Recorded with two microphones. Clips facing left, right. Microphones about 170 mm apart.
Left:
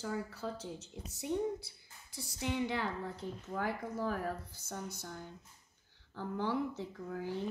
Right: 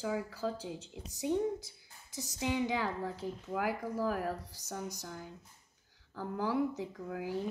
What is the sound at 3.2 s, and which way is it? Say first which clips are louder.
A woman's voice: right 2 dB; 10° right (ahead or behind).